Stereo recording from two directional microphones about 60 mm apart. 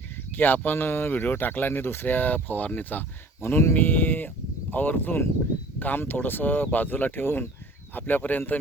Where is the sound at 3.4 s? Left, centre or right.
Left.